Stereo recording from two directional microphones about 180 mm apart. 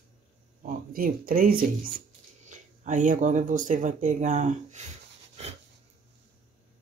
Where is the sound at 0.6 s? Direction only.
50° right (ahead or behind).